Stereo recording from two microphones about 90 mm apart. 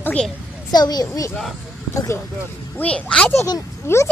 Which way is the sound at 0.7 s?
50° left (ahead or behind).